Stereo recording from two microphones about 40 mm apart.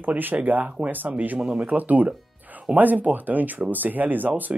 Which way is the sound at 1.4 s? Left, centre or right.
Right.